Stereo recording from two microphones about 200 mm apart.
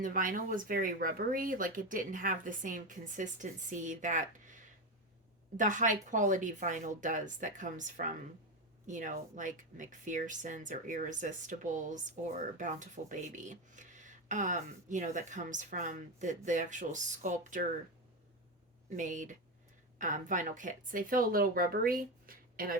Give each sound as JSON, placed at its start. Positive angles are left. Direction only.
{"t": 0.0, "sound": "speech", "side_deg": -40}
{"t": 5.5, "sound": "speech", "side_deg": -40}
{"t": 18.9, "sound": "speech", "side_deg": -40}